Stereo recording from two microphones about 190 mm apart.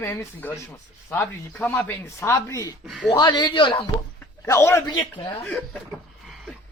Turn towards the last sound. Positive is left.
turn(degrees=0)  # may be behind; listen again after turning